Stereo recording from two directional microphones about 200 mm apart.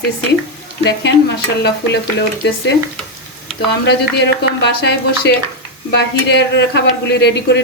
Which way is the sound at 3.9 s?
60° left (ahead or behind).